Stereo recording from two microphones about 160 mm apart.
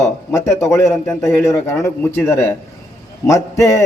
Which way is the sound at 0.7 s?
15° left (ahead or behind).